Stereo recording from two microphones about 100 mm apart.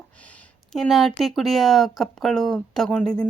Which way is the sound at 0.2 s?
15° left (ahead or behind).